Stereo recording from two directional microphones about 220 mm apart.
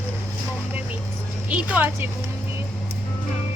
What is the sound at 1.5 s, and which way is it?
Speech, 10° right (ahead or behind).